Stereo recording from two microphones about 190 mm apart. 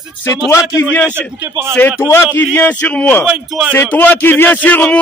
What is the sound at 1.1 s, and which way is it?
Speech, 10° right (ahead or behind).